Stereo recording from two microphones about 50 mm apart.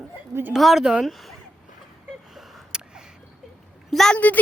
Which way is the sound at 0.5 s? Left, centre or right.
Centre.